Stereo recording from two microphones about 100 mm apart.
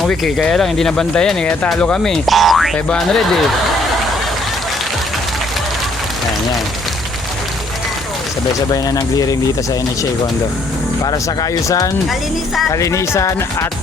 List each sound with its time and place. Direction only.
0.0 s speech: 5° left (ahead or behind)
2.7 s speech: 10° left (ahead or behind)
8.7 s speech: 40° left (ahead or behind)
11.0 s speech: 40° left (ahead or behind)